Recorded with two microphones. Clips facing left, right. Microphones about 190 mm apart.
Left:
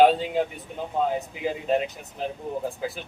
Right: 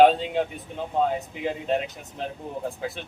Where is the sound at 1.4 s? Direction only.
5° left (ahead or behind).